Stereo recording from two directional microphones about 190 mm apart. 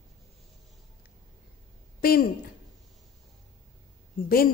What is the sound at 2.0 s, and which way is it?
Speech, 50° left (ahead or behind).